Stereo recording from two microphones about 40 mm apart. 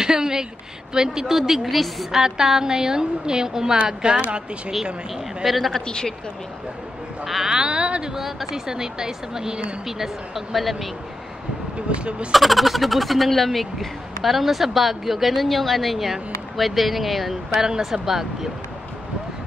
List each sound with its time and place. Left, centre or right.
0.0 s a sound: centre
0.9 s a woman's voice: centre
2.1 s a woman's voice: centre
5.4 s speech: centre
5.8 s speech: centre
7.2 s speech: centre
7.5 s speech: right
8.1 s a woman's voice: centre
11.9 s speech: right
12.3 s speech: centre
17.6 s a woman's voice: centre